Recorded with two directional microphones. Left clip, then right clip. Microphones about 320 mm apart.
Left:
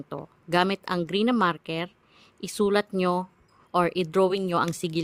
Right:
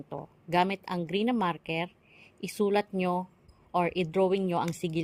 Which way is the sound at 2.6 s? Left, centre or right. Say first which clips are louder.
Left 4 dB; left.